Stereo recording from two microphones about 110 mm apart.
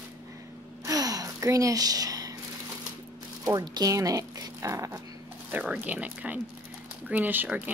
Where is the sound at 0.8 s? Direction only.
35° right (ahead or behind).